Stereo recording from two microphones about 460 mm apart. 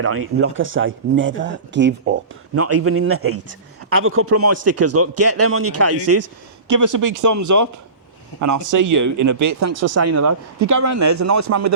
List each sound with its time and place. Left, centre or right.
0.0 s a man's voice: right